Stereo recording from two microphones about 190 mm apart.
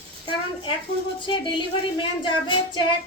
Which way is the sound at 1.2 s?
25° left (ahead or behind).